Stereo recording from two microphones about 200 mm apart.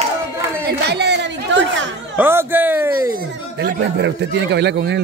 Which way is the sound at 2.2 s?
10° right (ahead or behind).